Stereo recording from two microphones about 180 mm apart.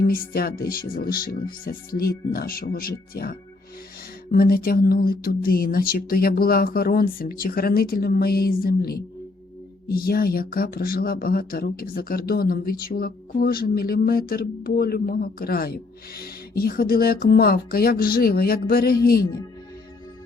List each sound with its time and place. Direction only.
0.0 s speech: 55° left (ahead or behind)